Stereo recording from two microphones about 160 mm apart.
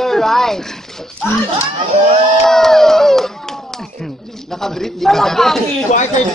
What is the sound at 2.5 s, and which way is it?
Speech, centre (ahead or behind).